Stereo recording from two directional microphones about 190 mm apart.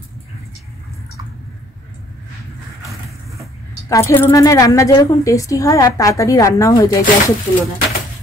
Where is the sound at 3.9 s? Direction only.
15° left (ahead or behind).